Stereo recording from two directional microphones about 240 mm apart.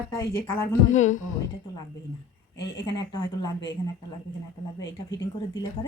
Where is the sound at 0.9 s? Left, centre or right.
Left.